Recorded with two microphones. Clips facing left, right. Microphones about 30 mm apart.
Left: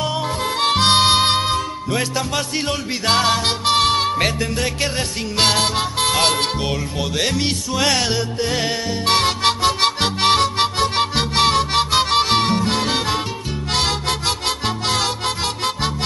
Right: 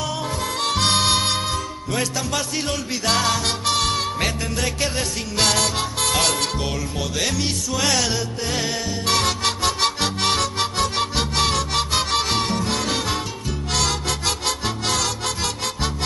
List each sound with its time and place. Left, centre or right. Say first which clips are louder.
0.0 s music: left 4 dB; left
13.7 s harmonica: left 3 dB; left
14.9 s music: left 3 dB; left